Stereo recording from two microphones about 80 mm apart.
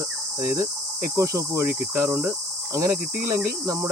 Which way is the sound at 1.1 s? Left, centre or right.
Right.